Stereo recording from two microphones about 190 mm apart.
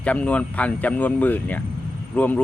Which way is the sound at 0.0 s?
5° left (ahead or behind).